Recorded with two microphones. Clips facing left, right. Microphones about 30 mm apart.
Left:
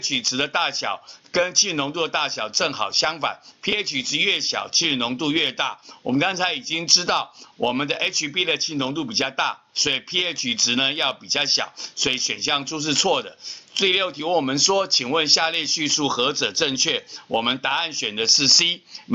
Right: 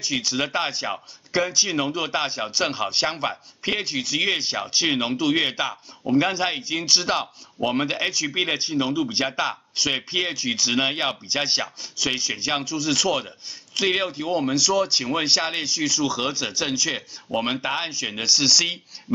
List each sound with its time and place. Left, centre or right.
0.0 s speech: centre